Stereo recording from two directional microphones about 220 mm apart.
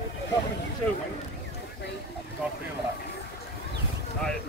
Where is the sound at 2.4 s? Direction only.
5° right (ahead or behind).